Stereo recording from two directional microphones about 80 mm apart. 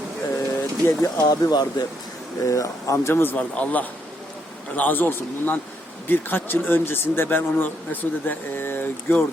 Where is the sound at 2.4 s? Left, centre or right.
Left.